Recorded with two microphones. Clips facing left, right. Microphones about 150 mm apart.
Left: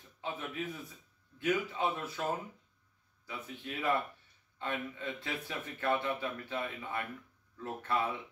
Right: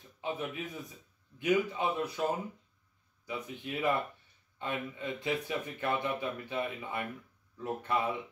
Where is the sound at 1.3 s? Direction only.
15° right (ahead or behind).